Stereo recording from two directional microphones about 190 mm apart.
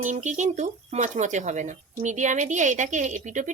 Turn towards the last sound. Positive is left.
turn(degrees=-40)  # may be behind; listen again after turning